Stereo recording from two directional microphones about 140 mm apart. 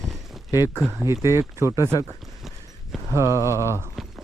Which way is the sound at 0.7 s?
5° left (ahead or behind).